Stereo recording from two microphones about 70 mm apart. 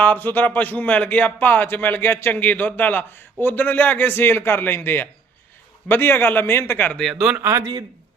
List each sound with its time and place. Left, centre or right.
0.0 s a man's voice: left
6.9 s speech: centre
7.3 s a man's voice: right
7.6 s speech: right